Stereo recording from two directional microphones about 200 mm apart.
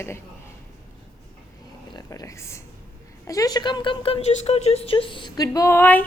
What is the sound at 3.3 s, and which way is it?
A woman's voice, 20° left (ahead or behind).